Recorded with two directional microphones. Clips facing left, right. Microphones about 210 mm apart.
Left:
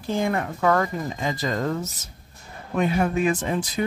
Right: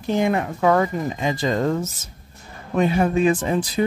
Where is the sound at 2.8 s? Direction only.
30° right (ahead or behind).